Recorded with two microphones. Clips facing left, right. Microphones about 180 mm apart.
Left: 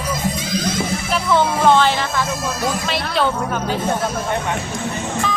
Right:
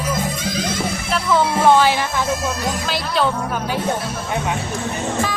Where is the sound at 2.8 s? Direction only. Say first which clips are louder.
Right 2 dB; centre (ahead or behind).